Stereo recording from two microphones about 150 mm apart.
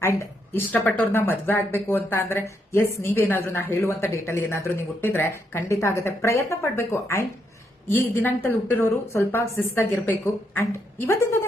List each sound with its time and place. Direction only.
0.0 s speech: 15° left (ahead or behind)